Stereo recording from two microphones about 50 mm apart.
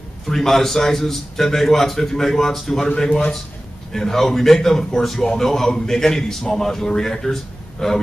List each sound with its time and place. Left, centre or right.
0.3 s a man's voice: centre
2.9 s speech: centre
3.9 s a man's voice: centre